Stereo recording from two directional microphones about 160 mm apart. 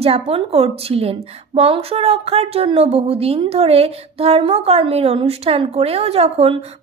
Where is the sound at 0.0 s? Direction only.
40° right (ahead or behind).